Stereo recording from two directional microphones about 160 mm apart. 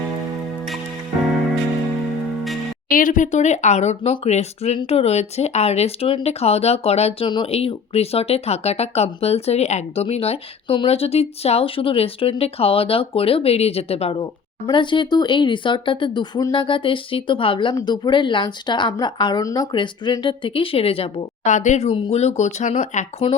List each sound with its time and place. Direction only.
2.9 s speech: 55° left (ahead or behind)